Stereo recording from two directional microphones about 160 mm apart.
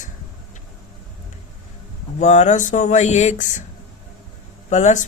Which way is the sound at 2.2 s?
45° left (ahead or behind).